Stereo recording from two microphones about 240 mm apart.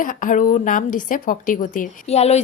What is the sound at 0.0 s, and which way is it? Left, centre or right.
A woman's voice, left.